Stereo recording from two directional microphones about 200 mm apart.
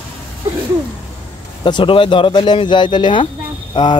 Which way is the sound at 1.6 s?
25° left (ahead or behind).